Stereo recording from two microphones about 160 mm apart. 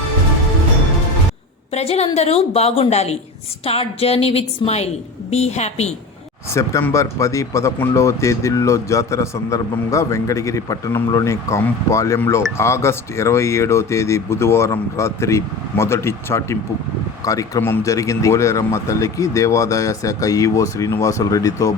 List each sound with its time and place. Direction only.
1.7 s a woman's voice: 40° left (ahead or behind)
6.5 s speech: 15° left (ahead or behind)